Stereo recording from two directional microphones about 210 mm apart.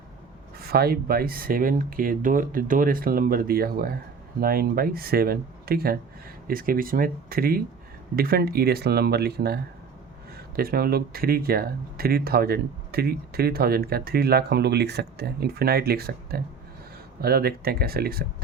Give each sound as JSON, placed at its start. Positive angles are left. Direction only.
{"t": 0.6, "sound": "speech", "side_deg": -45}